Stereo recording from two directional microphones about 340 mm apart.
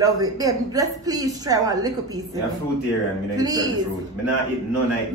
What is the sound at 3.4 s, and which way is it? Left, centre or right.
Speech, centre.